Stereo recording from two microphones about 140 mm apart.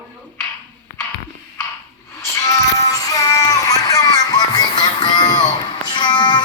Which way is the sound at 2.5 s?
25° left (ahead or behind).